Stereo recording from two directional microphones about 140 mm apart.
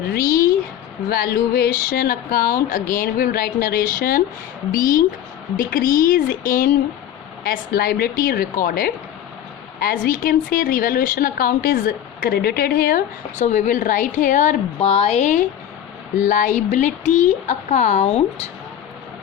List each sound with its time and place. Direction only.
0.2 s a sound: 90° left
1.1 s a woman's voice: 90° left; by 14.5 s 70° left (ahead or behind)
14.8 s speech: 45° left (ahead or behind)
16.1 s speech: 65° left (ahead or behind); by 18.4 s 50° left (ahead or behind)